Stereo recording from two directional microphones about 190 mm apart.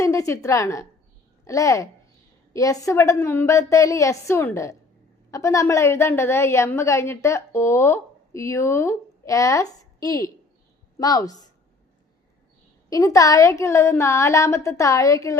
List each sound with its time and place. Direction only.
0.0 s a woman's voice: 15° left (ahead or behind)
12.9 s a woman's voice: 20° left (ahead or behind)